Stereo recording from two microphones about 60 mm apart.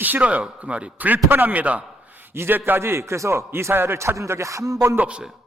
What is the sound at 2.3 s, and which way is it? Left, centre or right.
Speech, right.